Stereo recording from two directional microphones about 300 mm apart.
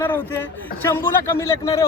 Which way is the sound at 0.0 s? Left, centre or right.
Centre.